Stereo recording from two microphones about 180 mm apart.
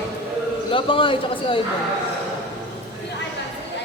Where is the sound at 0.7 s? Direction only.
30° left (ahead or behind).